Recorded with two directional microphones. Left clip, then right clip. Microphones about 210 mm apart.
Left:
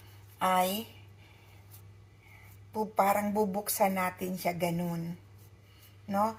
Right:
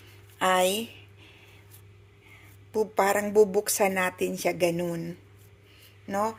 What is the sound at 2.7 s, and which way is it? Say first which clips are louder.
A woman's voice: right 3 dB; 60° right (ahead or behind).